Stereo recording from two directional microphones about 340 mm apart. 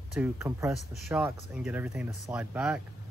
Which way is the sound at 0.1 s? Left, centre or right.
Centre.